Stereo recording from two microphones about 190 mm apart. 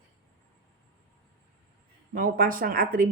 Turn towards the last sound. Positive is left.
turn(degrees=-50)  # may be behind; listen again after turning